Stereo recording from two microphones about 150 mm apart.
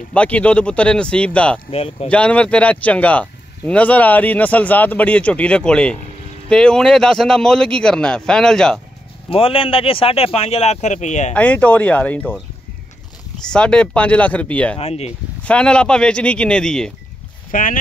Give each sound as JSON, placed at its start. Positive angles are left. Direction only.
{"t": 0.1, "sound": "speech", "side_deg": 10}
{"t": 1.7, "sound": "speech", "side_deg": 40}
{"t": 2.0, "sound": "speech", "side_deg": 10}
{"t": 9.3, "sound": "speech", "side_deg": 40}
{"t": 11.3, "sound": "speech", "side_deg": 10}
{"t": 13.5, "sound": "speech", "side_deg": 5}
{"t": 14.8, "sound": "speech", "side_deg": 45}
{"t": 15.4, "sound": "speech", "side_deg": 5}
{"t": 17.5, "sound": "speech", "side_deg": 65}